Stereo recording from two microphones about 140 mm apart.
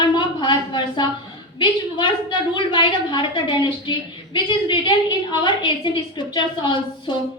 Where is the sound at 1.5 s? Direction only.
35° left (ahead or behind).